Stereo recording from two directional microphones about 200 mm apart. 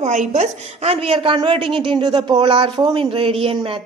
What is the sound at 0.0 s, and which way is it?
A woman's voice, 35° right (ahead or behind).